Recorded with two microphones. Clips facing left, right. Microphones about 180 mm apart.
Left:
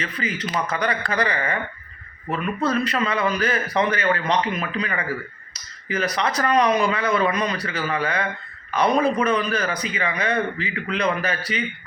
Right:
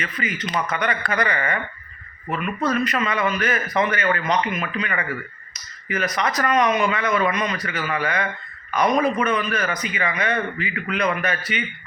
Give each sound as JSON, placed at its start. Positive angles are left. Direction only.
{"t": 0.0, "sound": "speech", "side_deg": 30}
{"t": 2.6, "sound": "speech", "side_deg": 30}